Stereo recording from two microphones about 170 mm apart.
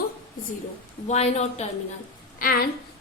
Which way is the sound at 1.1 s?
40° left (ahead or behind).